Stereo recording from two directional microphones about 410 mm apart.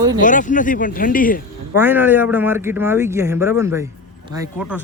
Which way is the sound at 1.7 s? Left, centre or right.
Centre.